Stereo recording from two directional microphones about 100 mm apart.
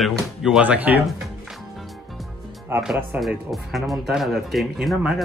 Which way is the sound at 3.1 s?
15° right (ahead or behind).